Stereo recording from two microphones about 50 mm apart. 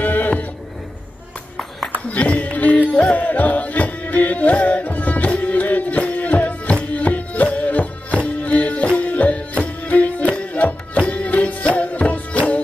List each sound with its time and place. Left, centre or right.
0.0 s music: left
2.0 s a sound: left
3.2 s music: left